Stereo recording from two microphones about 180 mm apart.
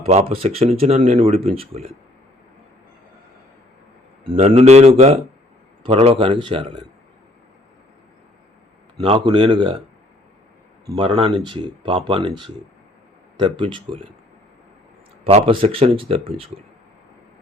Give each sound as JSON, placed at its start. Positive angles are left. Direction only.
{"t": 0.0, "sound": "speech", "side_deg": -35}
{"t": 4.2, "sound": "speech", "side_deg": -30}
{"t": 9.0, "sound": "speech", "side_deg": -30}
{"t": 10.9, "sound": "speech", "side_deg": -30}
{"t": 15.2, "sound": "speech", "side_deg": -30}